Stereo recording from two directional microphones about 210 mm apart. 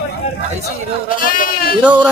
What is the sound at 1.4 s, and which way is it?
Speech, 45° left (ahead or behind).